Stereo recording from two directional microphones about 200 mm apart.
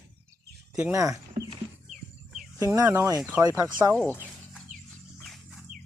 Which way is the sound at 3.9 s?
5° left (ahead or behind).